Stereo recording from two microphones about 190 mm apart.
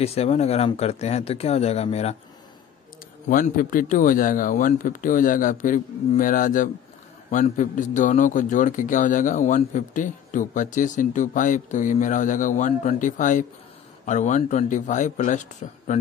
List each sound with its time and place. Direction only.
0.0 s speech: 30° left (ahead or behind)
3.3 s a man's voice: 45° left (ahead or behind)